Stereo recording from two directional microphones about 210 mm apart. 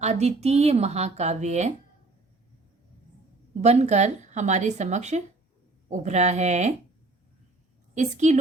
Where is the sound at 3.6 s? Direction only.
30° right (ahead or behind).